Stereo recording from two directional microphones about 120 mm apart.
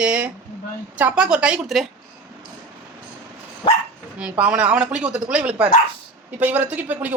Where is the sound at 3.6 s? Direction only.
50° left (ahead or behind).